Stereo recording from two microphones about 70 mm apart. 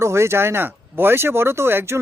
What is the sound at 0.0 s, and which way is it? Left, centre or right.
Speech, right.